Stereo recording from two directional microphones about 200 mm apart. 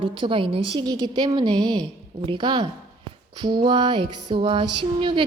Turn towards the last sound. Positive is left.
turn(degrees=-25)  # may be behind; listen again after turning